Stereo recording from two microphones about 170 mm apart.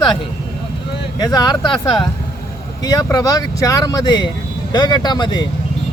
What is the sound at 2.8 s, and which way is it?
Speech, 20° left (ahead or behind).